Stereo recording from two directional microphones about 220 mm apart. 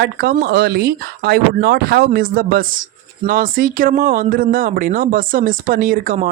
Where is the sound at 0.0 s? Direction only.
45° right (ahead or behind).